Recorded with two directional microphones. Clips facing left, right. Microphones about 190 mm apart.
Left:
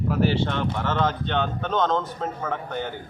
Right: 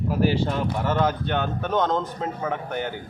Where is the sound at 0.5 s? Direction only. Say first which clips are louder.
Right 1 dB; 10° right (ahead or behind).